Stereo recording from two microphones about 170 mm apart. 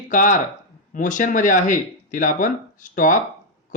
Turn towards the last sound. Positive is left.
turn(degrees=50)  # may be behind; listen again after turning